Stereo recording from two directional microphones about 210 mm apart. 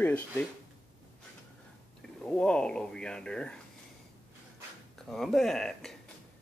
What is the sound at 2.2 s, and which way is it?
Speech, 5° left (ahead or behind).